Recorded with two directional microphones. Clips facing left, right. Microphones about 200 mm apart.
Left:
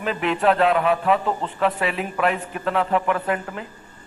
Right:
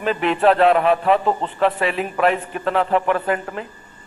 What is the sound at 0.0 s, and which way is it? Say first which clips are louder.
A man's voice: right 4 dB; 35° right (ahead or behind).